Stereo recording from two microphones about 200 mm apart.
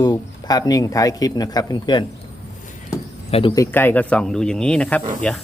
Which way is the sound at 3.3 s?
20° left (ahead or behind).